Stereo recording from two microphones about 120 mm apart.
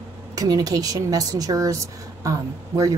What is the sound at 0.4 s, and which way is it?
A woman's voice, 30° right (ahead or behind).